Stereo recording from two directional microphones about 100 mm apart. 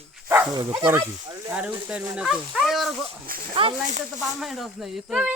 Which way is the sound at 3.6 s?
65° right (ahead or behind).